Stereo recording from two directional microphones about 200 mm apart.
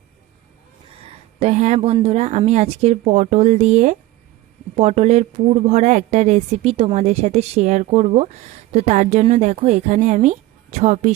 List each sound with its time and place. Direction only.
1.4 s speech: 35° right (ahead or behind)